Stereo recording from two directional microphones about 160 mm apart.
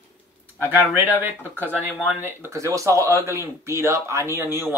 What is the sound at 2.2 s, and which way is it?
Speech, 15° right (ahead or behind).